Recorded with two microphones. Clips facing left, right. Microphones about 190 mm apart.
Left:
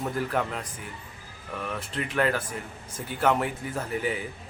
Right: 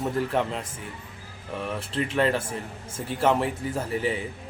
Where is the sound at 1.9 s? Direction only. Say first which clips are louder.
Right 2 dB; 30° right (ahead or behind).